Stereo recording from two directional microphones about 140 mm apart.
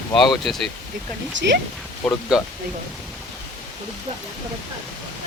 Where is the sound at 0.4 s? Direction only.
Centre (ahead or behind).